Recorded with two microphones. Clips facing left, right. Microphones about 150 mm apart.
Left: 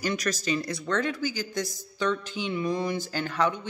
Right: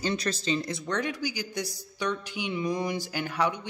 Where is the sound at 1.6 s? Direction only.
45° left (ahead or behind).